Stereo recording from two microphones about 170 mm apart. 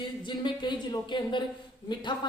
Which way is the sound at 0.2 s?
25° left (ahead or behind).